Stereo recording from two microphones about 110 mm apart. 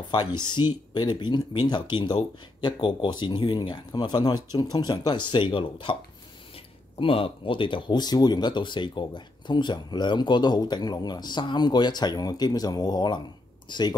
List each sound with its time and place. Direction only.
0.1 s speech: 40° left (ahead or behind)
7.0 s speech: 55° left (ahead or behind)